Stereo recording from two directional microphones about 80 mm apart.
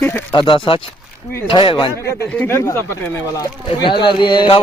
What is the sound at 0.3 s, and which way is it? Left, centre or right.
Speech, left.